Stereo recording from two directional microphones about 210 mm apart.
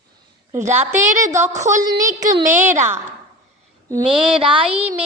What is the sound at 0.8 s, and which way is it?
Music, 10° right (ahead or behind).